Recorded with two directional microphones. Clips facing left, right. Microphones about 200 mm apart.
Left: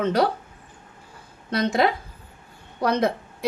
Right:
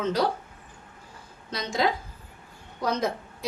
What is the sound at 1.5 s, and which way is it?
A woman's voice, 60° left (ahead or behind).